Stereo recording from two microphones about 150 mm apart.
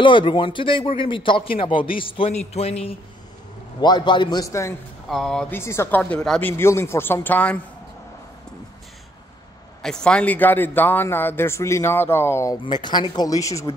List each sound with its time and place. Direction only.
0.0 s speech: 35° left (ahead or behind)
3.8 s a man's voice: 30° left (ahead or behind)
5.1 s speech: 5° left (ahead or behind)
5.5 s a man's voice: 15° left (ahead or behind)
6.5 s a man's voice: 15° left (ahead or behind)
9.8 s a man's voice: 5° left (ahead or behind)
12.6 s a man's voice: 30° left (ahead or behind)